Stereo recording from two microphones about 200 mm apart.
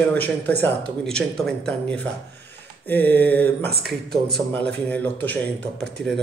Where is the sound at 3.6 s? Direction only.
50° right (ahead or behind).